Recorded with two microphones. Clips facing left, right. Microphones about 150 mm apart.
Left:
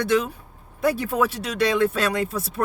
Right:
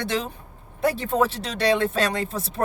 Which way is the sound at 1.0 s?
30° right (ahead or behind).